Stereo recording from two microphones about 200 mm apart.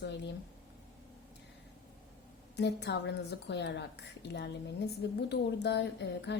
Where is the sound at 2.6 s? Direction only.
60° left (ahead or behind).